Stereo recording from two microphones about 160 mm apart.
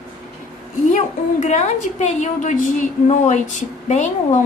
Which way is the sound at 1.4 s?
45° left (ahead or behind).